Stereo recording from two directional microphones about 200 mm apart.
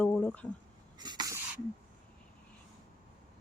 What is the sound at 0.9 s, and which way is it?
Cough, 20° right (ahead or behind).